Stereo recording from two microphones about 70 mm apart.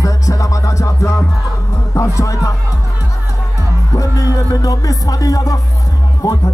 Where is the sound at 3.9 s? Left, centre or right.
Left.